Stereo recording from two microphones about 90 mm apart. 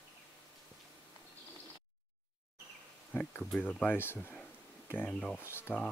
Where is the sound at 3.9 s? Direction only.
25° left (ahead or behind).